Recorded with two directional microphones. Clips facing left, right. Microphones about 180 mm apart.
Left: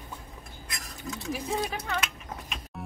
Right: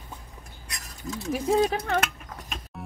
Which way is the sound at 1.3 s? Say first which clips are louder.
Right 9 dB; 45° right (ahead or behind).